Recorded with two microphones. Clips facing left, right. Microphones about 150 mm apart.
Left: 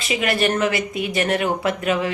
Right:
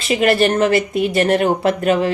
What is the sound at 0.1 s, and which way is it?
A woman's voice, 40° right (ahead or behind).